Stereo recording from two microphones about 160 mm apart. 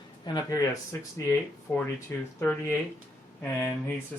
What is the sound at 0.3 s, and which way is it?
Speech, 20° left (ahead or behind).